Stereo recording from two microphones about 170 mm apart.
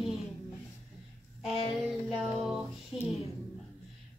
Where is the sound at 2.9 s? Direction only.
35° left (ahead or behind).